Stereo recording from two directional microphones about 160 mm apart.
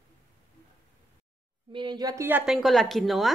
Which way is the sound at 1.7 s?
30° right (ahead or behind).